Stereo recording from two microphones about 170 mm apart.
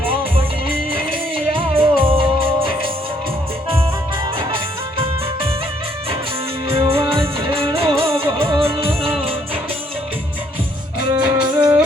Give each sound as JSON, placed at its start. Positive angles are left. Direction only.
{"t": 1.5, "sound": "music", "side_deg": -30}
{"t": 6.9, "sound": "music", "side_deg": -30}
{"t": 11.1, "sound": "music", "side_deg": -20}